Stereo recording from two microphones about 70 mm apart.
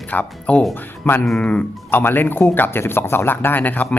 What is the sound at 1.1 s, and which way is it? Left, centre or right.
Speech, left.